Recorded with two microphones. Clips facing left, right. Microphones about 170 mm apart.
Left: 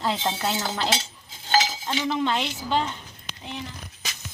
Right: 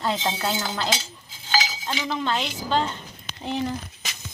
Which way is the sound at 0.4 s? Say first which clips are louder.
Even; 25° left (ahead or behind).